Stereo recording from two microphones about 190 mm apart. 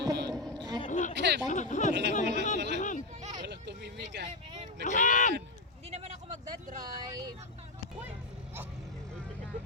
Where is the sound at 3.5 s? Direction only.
65° right (ahead or behind).